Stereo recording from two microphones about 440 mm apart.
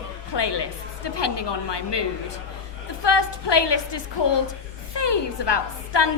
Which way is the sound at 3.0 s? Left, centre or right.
Left.